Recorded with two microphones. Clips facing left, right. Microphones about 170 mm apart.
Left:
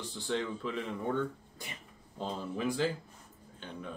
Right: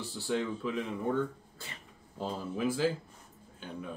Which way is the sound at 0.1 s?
5° right (ahead or behind).